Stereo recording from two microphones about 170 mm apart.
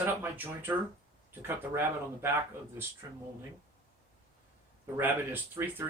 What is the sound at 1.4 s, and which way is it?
Speech, 15° right (ahead or behind).